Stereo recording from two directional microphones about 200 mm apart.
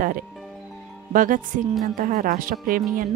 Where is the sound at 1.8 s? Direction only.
45° right (ahead or behind).